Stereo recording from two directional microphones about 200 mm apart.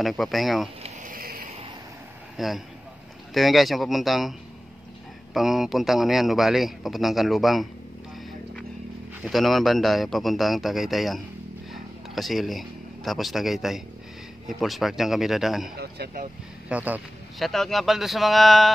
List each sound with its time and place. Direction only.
0.0 s a man's voice: centre (ahead or behind)
0.8 s a sound: 45° right (ahead or behind)
2.3 s a man's voice: centre (ahead or behind)
9.2 s a man's voice: centre (ahead or behind)
15.8 s speech: 55° right (ahead or behind)
16.6 s a man's voice: 5° right (ahead or behind)